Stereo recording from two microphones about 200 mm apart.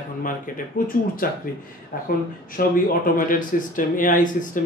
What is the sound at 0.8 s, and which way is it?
Speech, 45° left (ahead or behind).